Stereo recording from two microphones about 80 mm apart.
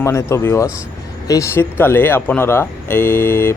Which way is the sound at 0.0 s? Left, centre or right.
Left.